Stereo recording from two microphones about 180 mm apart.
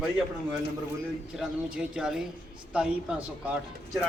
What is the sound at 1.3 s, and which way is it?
Speech, 5° right (ahead or behind).